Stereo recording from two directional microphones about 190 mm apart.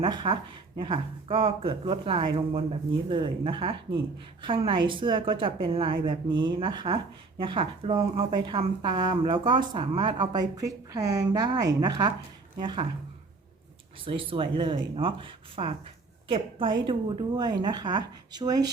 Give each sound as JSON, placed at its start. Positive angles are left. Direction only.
{"t": 0.0, "sound": "a woman's voice", "side_deg": -25}
{"t": 14.0, "sound": "a woman's voice", "side_deg": -25}